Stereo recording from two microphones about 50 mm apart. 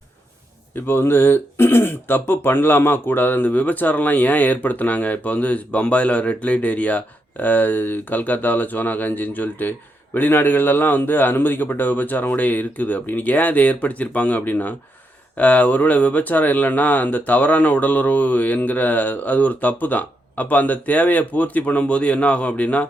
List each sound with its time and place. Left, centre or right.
0.9 s speech: left